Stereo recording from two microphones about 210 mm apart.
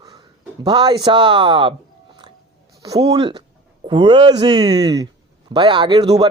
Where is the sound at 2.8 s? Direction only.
20° right (ahead or behind).